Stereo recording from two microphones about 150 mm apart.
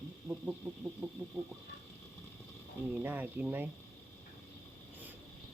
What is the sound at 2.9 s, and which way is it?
Speech, 10° right (ahead or behind).